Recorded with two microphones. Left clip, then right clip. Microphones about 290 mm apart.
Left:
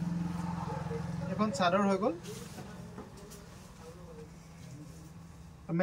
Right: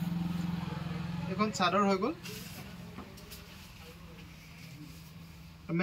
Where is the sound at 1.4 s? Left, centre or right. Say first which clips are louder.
Even; centre.